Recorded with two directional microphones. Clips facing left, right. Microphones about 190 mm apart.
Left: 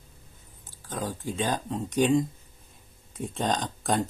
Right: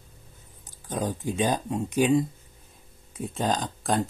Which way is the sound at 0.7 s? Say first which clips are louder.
Right 4 dB; 20° right (ahead or behind).